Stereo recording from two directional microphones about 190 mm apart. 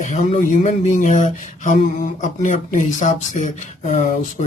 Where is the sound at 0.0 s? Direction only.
40° left (ahead or behind).